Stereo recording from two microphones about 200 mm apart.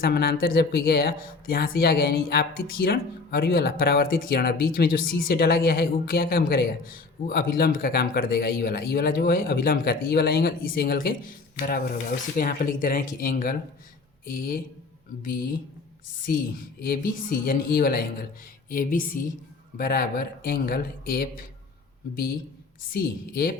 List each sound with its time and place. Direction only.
0.0 s speech: 50° left (ahead or behind)
16.8 s speech: 45° left (ahead or behind)
22.9 s speech: 45° left (ahead or behind)